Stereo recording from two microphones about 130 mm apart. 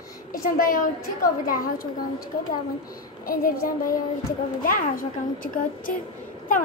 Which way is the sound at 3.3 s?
90° left.